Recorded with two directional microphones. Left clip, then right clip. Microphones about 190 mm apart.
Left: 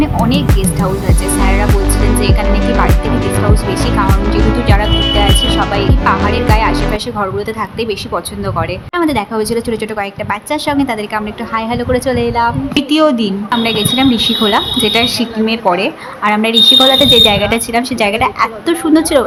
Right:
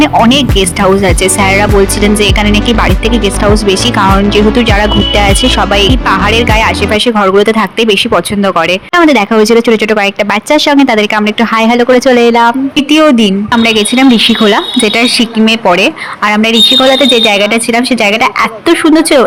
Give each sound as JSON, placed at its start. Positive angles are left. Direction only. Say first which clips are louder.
{"t": 0.0, "sound": "speech", "louder": "right 8 dB", "side_deg": -35}
{"t": 4.6, "sound": "a woman's voice", "louder": "right 5 dB", "side_deg": -40}